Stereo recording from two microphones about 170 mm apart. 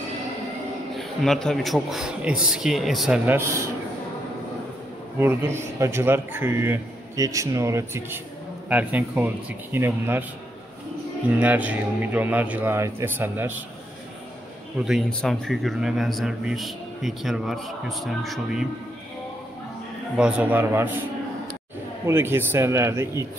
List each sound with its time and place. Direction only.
0.9 s a man's voice: centre (ahead or behind)
3.3 s a man's voice: 15° right (ahead or behind)
5.2 s a man's voice: 15° right (ahead or behind)
11.2 s a man's voice: 10° right (ahead or behind)
14.9 s a man's voice: centre (ahead or behind)
20.2 s a man's voice: 5° right (ahead or behind)
22.0 s a man's voice: 15° right (ahead or behind)